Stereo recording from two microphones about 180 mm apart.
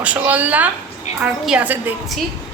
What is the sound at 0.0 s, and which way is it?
A woman's voice, 10° right (ahead or behind).